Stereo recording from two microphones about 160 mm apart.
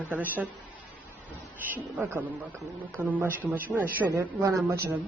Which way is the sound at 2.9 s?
15° right (ahead or behind).